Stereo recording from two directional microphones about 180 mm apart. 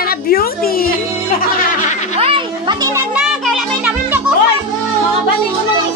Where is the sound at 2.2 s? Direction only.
30° right (ahead or behind).